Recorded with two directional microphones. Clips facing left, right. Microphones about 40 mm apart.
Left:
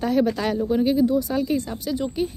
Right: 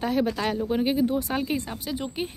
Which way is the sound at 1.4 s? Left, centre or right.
Right.